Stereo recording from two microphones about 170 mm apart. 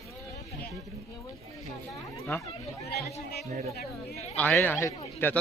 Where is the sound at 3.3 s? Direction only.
65° left (ahead or behind).